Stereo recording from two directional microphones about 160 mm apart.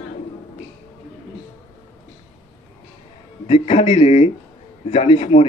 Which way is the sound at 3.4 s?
40° left (ahead or behind).